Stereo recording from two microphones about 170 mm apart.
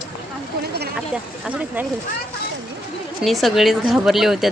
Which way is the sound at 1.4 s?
10° right (ahead or behind).